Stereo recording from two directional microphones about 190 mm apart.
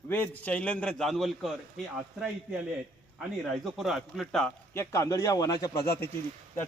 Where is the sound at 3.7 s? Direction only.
Centre (ahead or behind).